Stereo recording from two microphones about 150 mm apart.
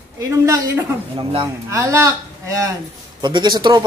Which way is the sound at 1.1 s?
30° right (ahead or behind).